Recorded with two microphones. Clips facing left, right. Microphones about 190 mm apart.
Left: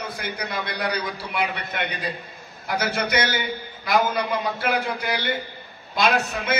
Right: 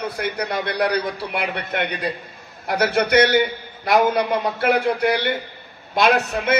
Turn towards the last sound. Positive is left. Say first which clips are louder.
# right 4 dB
turn(degrees=-60)  # may be behind; listen again after turning